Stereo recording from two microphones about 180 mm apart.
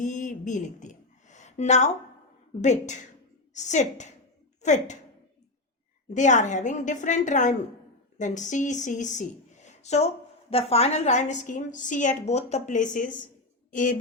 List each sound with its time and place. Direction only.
0.0 s a sound: 45° left (ahead or behind)
2.6 s a woman's voice: 40° left (ahead or behind)
6.1 s a woman's voice: 40° left (ahead or behind)